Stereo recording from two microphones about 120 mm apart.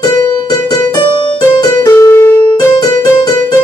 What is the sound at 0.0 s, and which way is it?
Music, 35° left (ahead or behind).